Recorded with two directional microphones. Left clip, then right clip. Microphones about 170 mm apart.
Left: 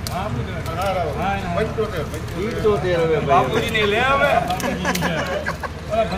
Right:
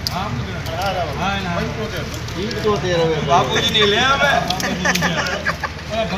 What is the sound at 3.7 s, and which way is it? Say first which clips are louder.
Speech: right 2 dB; 60° left (ahead or behind).